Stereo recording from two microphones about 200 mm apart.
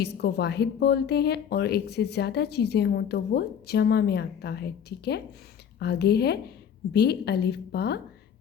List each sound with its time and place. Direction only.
0.0 s speech: 55° left (ahead or behind)